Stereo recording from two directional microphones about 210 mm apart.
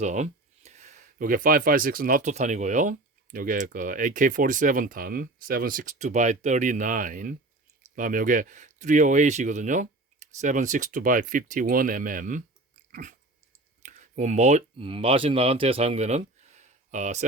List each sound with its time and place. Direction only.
0.0 s speech: 35° right (ahead or behind)
12.9 s dog: 40° right (ahead or behind)
13.8 s speech: 35° right (ahead or behind)